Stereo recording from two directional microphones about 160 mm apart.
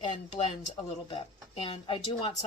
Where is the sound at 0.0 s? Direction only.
30° left (ahead or behind).